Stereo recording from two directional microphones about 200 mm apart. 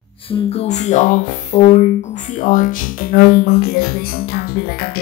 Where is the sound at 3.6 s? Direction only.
50° left (ahead or behind).